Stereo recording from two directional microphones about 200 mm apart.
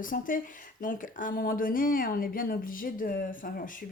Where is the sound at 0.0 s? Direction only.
45° left (ahead or behind).